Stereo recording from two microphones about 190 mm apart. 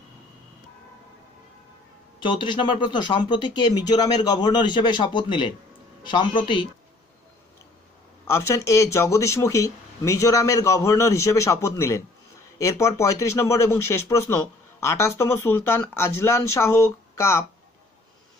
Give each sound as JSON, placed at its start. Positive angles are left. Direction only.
{"t": 2.1, "sound": "speech", "side_deg": 25}
{"t": 8.3, "sound": "speech", "side_deg": 15}